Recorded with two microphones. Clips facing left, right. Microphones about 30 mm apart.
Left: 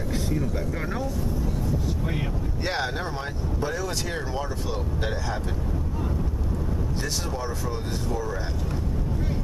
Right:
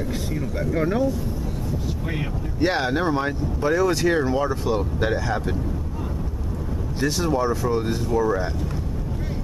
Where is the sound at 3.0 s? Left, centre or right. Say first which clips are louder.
Right 8 dB; centre.